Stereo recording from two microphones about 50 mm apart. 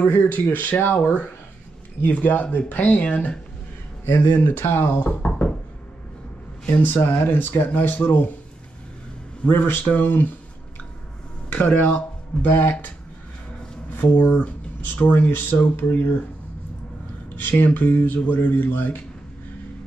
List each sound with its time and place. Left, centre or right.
0.0 s speech: left
5.2 s knock: left
6.7 s speech: left
9.5 s speech: left
11.5 s speech: left
14.1 s speech: left
17.4 s speech: left